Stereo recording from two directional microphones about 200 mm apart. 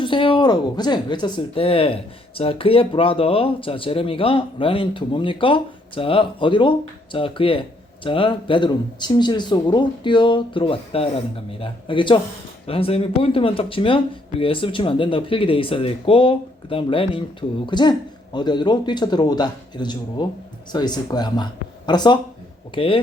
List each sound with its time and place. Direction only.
0.0 s speech: 25° left (ahead or behind)